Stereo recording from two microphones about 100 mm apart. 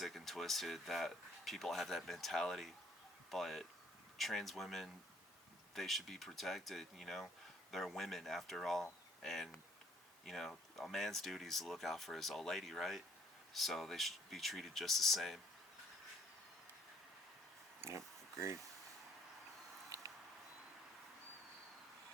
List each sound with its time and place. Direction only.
0.0 s speech: centre (ahead or behind)
17.8 s speech: 30° right (ahead or behind)